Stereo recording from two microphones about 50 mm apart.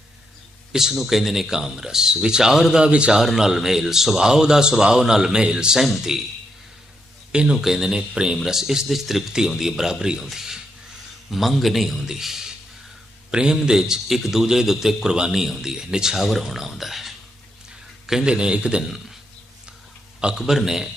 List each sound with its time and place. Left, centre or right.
0.7 s a man's voice: centre
3.2 s a man's voice: centre
7.5 s a man's voice: centre
18.0 s a sound: centre
18.3 s a man's voice: centre
20.4 s a man's voice: centre